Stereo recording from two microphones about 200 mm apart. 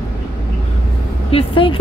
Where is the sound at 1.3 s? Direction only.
25° left (ahead or behind).